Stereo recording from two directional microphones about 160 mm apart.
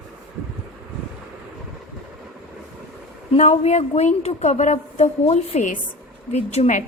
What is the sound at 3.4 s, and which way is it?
A woman's voice, 45° left (ahead or behind).